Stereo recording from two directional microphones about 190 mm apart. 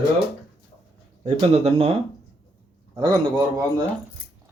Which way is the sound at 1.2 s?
35° right (ahead or behind).